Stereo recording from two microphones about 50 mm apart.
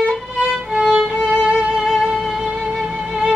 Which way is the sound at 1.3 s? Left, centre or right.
Right.